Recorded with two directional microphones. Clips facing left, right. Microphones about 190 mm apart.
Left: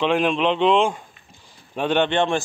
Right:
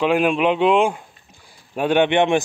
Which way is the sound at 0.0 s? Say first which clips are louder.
Right 2 dB; 5° right (ahead or behind).